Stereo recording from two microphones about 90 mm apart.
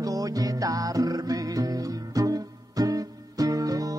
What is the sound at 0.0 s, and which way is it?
Music, 40° right (ahead or behind).